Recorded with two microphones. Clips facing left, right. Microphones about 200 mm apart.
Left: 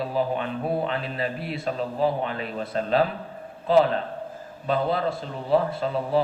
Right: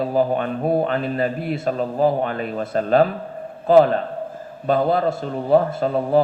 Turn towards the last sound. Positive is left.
turn(degrees=-50)  # may be behind; listen again after turning